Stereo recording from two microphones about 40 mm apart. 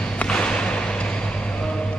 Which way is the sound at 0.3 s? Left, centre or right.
Left.